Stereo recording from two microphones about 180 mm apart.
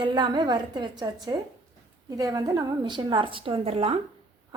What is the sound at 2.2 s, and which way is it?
A woman's voice, 20° right (ahead or behind).